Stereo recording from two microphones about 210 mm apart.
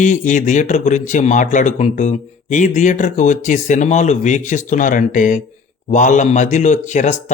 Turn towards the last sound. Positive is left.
turn(degrees=35)  # may be behind; listen again after turning